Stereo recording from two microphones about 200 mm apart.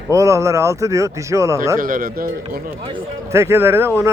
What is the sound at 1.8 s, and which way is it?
Speech, 45° right (ahead or behind).